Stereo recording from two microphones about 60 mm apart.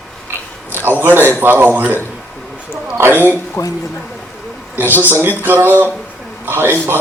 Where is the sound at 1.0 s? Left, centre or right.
Right.